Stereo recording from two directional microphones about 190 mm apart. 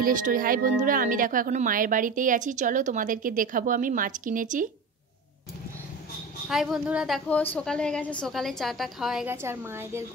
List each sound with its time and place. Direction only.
0.0 s speech: 45° right (ahead or behind)
6.5 s a woman's voice: centre (ahead or behind)
9.3 s a woman's voice: 10° right (ahead or behind)